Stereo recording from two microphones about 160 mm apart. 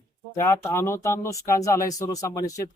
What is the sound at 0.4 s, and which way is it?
Speech, 15° left (ahead or behind).